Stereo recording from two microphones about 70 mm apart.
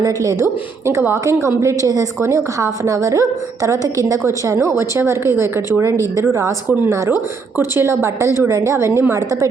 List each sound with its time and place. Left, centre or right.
0.0 s a woman's voice: right
7.5 s a woman's voice: right
9.1 s a woman's voice: right